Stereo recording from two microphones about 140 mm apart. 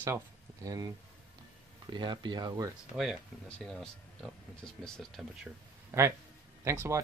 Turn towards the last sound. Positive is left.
turn(degrees=-20)  # may be behind; listen again after turning